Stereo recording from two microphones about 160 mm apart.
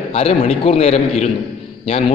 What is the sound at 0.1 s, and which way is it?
A man's voice, 40° left (ahead or behind).